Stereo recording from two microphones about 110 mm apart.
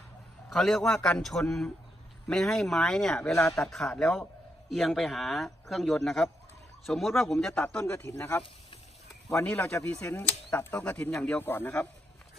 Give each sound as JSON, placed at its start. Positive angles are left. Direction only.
{"t": 0.5, "sound": "speech", "side_deg": 5}
{"t": 4.6, "sound": "speech", "side_deg": 0}
{"t": 7.8, "sound": "speech", "side_deg": 20}